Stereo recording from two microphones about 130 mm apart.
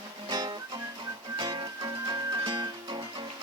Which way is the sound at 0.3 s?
35° right (ahead or behind).